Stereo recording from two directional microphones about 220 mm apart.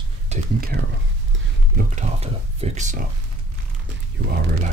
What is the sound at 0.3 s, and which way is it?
Speech, 40° right (ahead or behind).